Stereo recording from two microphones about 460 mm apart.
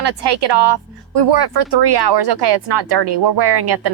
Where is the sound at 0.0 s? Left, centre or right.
Right.